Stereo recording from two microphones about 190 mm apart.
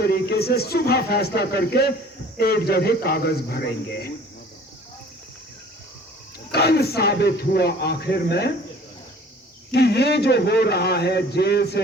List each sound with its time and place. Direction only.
0.0 s a man's voice: 55° left (ahead or behind)
6.5 s a man's voice: 55° left (ahead or behind)
9.7 s a man's voice: 60° left (ahead or behind)